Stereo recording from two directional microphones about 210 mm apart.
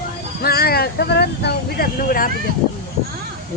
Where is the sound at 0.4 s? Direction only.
45° left (ahead or behind).